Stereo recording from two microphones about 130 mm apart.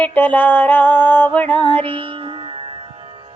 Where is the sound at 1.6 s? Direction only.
40° right (ahead or behind).